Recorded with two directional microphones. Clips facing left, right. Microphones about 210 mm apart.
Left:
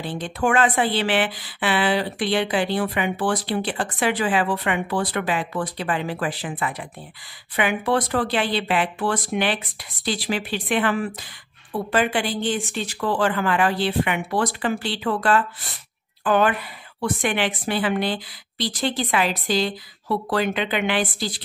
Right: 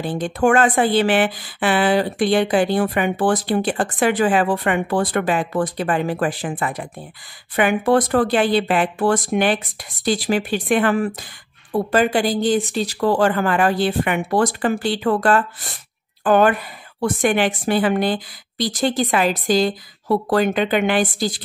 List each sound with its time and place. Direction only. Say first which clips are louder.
0.0 s speech: right 6 dB; 45° right (ahead or behind)